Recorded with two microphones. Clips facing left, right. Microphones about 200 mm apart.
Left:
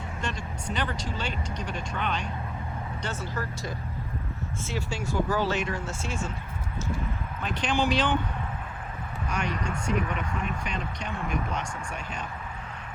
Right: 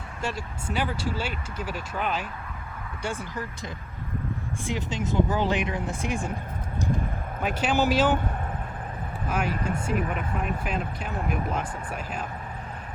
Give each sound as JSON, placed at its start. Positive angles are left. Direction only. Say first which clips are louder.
{"t": 0.2, "sound": "speech", "louder": "right 4 dB", "side_deg": -5}
{"t": 7.4, "sound": "speech", "louder": "right 3 dB", "side_deg": -10}
{"t": 9.3, "sound": "speech", "louder": "right 3 dB", "side_deg": -5}